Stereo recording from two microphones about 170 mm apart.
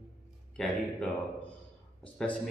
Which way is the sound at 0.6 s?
Centre (ahead or behind).